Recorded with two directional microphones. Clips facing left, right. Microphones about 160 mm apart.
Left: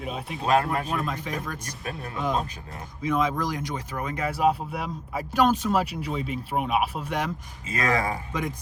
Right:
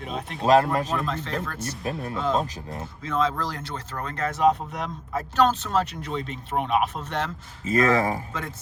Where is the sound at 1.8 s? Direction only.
25° right (ahead or behind).